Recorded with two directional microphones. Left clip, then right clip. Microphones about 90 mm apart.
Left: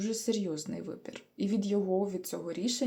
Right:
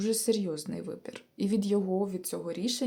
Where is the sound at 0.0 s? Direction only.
40° right (ahead or behind).